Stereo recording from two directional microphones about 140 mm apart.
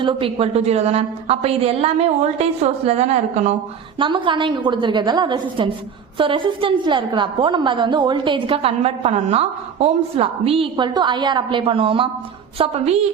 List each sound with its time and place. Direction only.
0.0 s a woman's voice: 40° right (ahead or behind); by 3.5 s 55° right (ahead or behind)
3.9 s a woman's voice: 35° right (ahead or behind)